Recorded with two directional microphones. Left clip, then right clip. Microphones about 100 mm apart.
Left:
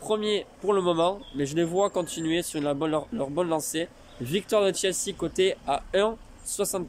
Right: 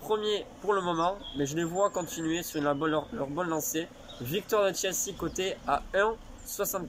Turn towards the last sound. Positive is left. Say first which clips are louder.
# left 4 dB
turn(degrees=40)  # may be behind; listen again after turning